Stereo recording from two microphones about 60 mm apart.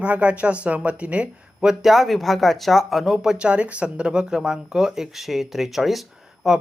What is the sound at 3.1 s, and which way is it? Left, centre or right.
Speech, centre.